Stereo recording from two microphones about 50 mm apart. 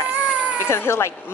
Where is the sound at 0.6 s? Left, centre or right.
Left.